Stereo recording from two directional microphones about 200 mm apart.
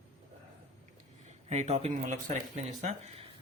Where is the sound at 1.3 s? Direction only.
35° right (ahead or behind).